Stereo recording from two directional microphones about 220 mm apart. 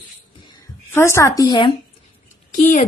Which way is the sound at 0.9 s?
10° left (ahead or behind).